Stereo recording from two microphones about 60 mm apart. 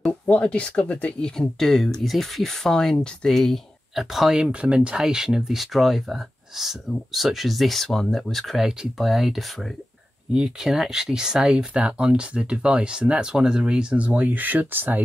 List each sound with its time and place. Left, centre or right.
0.0 s speech: centre
1.3 s speech: centre
4.5 s speech: centre
11.5 s speech: centre